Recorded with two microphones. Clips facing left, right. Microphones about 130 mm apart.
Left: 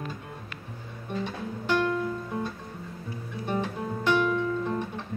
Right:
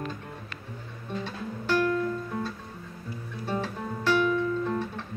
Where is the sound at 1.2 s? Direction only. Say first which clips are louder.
Left 2 dB; 15° left (ahead or behind).